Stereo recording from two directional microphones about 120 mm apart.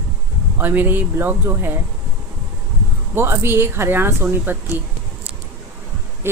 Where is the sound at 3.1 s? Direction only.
20° right (ahead or behind).